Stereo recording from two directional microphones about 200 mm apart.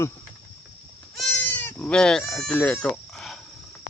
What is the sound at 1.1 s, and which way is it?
Goat, 5° left (ahead or behind).